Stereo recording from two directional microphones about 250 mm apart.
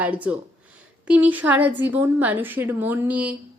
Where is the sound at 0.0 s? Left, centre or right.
Centre.